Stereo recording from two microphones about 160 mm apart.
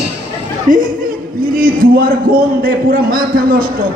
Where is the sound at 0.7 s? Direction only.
55° right (ahead or behind).